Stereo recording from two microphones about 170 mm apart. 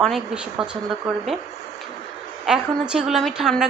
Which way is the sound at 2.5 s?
5° right (ahead or behind).